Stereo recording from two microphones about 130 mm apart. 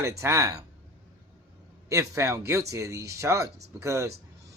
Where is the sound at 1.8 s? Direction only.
25° right (ahead or behind).